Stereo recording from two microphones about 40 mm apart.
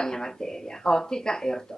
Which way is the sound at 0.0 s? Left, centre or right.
Centre.